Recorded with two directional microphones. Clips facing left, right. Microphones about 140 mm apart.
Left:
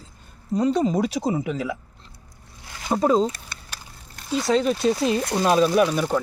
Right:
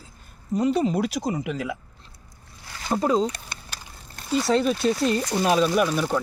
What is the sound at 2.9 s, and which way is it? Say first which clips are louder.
Speech: left 2 dB; 15° left (ahead or behind).